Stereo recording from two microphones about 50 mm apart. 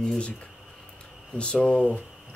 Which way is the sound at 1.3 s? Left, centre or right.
Left.